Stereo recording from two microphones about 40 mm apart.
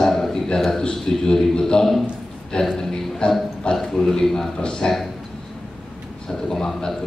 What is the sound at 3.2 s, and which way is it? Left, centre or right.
A man's voice, left.